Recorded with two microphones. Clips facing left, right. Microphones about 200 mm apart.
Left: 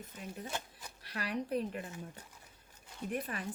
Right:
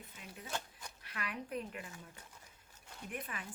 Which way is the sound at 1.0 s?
35° left (ahead or behind).